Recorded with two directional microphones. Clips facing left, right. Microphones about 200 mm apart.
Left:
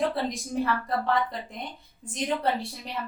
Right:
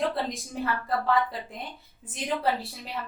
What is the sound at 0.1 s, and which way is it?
A woman's voice, centre (ahead or behind).